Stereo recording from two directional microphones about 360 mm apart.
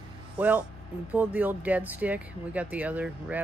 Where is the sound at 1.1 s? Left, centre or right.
Centre.